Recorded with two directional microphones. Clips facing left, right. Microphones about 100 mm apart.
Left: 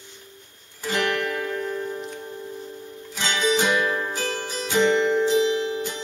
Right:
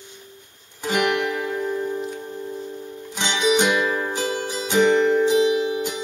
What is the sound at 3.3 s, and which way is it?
Music, 20° right (ahead or behind).